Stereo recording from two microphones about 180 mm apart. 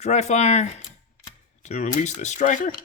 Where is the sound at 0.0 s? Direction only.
40° left (ahead or behind).